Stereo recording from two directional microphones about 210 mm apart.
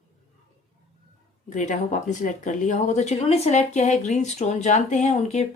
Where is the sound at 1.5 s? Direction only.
35° left (ahead or behind).